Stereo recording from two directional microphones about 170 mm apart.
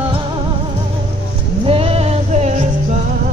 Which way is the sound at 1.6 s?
35° right (ahead or behind).